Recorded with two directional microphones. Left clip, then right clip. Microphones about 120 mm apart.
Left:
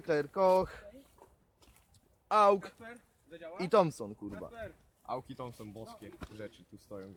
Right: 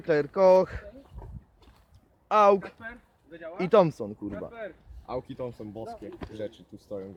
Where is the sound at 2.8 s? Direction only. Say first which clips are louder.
Right 8 dB; 50° right (ahead or behind).